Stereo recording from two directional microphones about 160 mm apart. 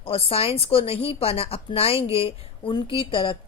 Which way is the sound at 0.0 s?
35° left (ahead or behind).